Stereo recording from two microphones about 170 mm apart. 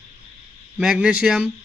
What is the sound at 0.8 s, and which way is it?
Speech, 5° right (ahead or behind).